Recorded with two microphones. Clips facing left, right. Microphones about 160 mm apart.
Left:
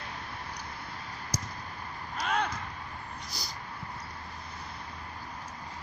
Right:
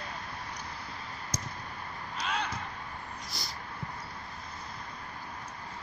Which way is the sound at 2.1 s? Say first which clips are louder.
Left 4 dB; 50° left (ahead or behind).